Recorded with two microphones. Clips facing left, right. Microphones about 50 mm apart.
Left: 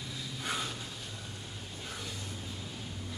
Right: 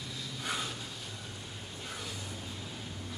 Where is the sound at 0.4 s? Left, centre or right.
Centre.